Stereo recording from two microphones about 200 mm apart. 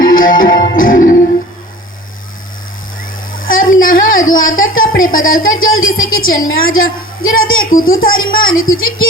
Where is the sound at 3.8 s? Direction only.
45° left (ahead or behind).